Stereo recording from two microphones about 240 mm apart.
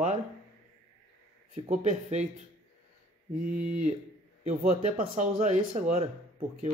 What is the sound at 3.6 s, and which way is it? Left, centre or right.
A man's voice, right.